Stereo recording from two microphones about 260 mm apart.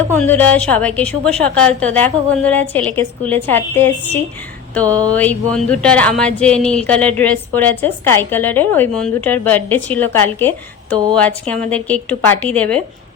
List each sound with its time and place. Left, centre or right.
0.1 s a woman's voice: centre